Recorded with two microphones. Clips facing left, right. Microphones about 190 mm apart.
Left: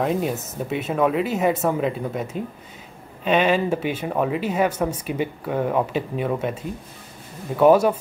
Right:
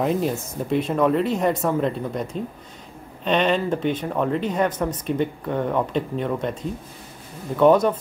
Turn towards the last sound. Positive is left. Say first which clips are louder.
# left 1 dB
turn(degrees=10)  # may be behind; listen again after turning